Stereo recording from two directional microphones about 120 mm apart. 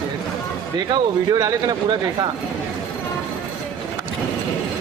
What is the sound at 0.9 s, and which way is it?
Speech, 30° right (ahead or behind).